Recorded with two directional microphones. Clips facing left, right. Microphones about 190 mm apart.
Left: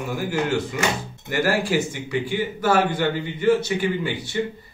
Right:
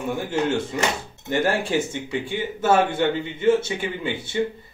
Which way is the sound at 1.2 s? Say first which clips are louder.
Even; 25° right (ahead or behind).